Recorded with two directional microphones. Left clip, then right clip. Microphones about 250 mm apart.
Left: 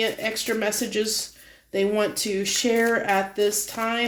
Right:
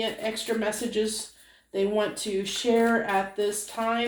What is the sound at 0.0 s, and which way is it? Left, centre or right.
Speech, left.